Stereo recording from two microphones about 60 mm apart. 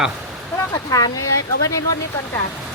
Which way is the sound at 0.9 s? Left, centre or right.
Left.